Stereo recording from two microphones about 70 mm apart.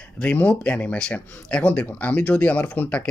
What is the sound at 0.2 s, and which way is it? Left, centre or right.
Speech, centre.